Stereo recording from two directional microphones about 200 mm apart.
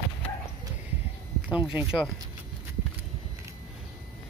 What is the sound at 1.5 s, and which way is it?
Speech, 5° right (ahead or behind).